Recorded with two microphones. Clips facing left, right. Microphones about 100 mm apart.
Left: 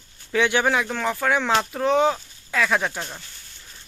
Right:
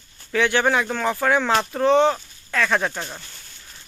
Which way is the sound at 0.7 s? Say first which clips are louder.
Right 2 dB; centre (ahead or behind).